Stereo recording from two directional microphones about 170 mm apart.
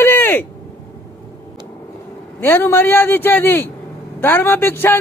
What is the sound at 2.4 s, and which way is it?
Speech, 10° left (ahead or behind).